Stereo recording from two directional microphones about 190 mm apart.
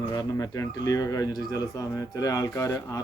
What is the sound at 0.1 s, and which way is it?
Speech, 20° left (ahead or behind).